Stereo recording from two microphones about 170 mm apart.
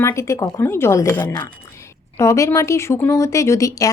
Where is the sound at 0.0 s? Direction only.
15° left (ahead or behind).